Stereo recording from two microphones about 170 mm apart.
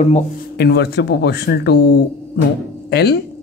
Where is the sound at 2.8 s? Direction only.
70° left (ahead or behind).